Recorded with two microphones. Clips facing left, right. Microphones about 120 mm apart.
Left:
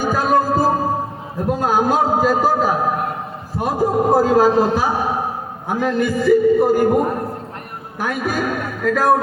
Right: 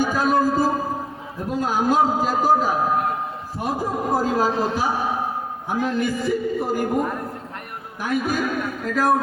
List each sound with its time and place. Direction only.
0.0 s music: 60° left (ahead or behind)
1.5 s a man's voice: 60° left (ahead or behind)
7.9 s a man's voice: 65° left (ahead or behind)